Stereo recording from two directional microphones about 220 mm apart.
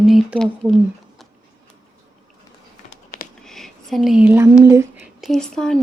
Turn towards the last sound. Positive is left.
turn(degrees=5)  # may be behind; listen again after turning